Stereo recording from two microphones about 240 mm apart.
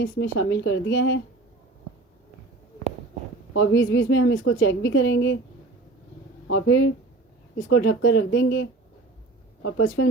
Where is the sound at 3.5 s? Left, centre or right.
Left.